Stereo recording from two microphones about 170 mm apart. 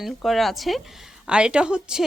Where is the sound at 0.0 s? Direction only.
Centre (ahead or behind).